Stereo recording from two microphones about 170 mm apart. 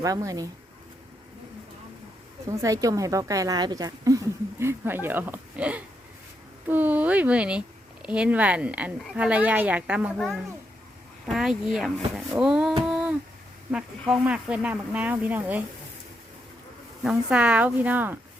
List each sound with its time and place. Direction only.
0.0 s speech: 20° right (ahead or behind)
2.5 s a woman's voice: 20° right (ahead or behind)
12.8 s humming: 5° right (ahead or behind)
13.7 s a woman's voice: 5° right (ahead or behind)
17.0 s a woman's voice: 5° right (ahead or behind)